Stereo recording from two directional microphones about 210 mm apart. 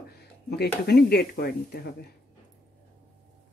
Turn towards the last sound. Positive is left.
turn(degrees=50)  # may be behind; listen again after turning